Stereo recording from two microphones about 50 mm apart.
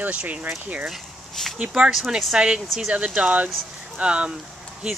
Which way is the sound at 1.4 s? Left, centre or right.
Centre.